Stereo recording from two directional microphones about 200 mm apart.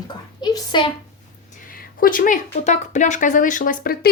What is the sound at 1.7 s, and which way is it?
Speech, 45° left (ahead or behind).